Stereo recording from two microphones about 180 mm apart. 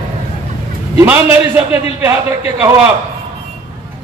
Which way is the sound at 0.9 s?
10° right (ahead or behind).